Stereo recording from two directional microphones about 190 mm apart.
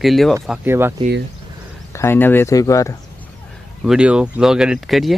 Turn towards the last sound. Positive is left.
turn(degrees=0)  # may be behind; listen again after turning